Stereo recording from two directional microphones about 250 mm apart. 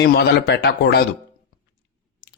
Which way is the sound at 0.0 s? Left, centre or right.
Left.